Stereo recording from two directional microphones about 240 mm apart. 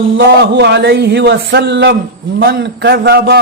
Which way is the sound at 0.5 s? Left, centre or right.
Right.